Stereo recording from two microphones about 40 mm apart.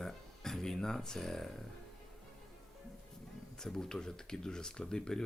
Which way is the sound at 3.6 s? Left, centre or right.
Centre.